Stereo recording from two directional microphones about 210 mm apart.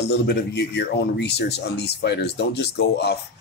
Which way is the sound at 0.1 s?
55° left (ahead or behind).